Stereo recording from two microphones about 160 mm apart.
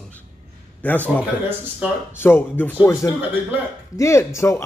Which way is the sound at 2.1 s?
15° left (ahead or behind).